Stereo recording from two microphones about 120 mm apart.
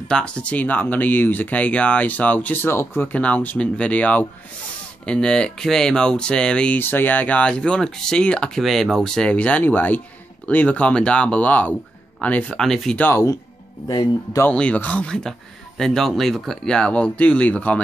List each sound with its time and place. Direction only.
0.1 s speech: 10° left (ahead or behind)
13.0 s speech: 20° left (ahead or behind)
13.8 s speech: 35° left (ahead or behind)
14.5 s speech: 10° left (ahead or behind)